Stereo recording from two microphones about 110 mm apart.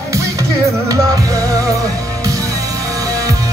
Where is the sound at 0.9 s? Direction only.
30° right (ahead or behind).